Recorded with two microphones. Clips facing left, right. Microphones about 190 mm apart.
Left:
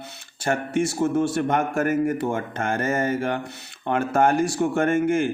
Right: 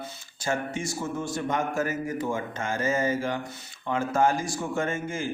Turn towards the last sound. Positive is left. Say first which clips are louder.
# left 9 dB
turn(degrees=65)  # may be behind; listen again after turning